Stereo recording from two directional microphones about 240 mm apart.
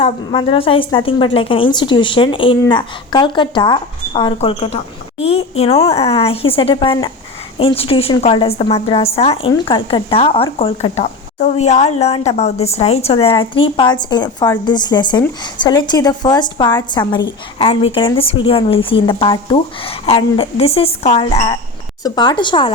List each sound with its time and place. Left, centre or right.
0.0 s a woman's voice: left